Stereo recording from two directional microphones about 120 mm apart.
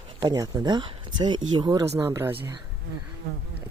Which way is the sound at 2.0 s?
20° right (ahead or behind).